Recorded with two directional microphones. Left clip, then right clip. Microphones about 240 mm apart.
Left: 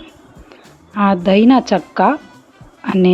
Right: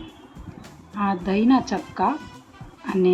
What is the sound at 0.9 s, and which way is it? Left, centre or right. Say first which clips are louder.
Speech: left 11 dB; left.